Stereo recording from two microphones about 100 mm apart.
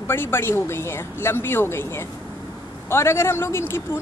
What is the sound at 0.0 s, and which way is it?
Speech, 25° left (ahead or behind).